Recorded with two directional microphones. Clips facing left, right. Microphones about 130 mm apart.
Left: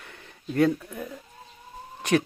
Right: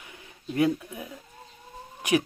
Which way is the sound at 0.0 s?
10° right (ahead or behind).